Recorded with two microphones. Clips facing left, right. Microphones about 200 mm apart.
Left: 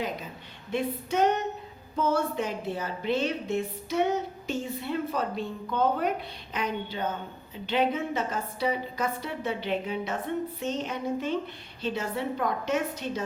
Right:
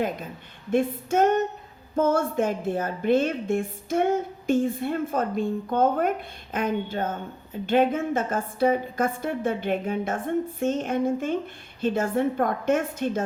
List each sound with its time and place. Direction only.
0.7 s a woman's voice: 50° right (ahead or behind)